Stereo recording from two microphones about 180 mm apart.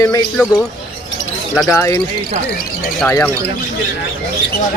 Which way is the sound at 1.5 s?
10° left (ahead or behind).